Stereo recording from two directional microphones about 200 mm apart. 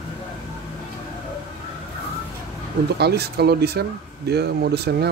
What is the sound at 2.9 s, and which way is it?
Speech, 55° right (ahead or behind).